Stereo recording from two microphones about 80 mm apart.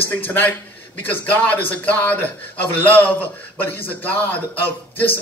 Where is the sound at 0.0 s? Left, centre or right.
Left.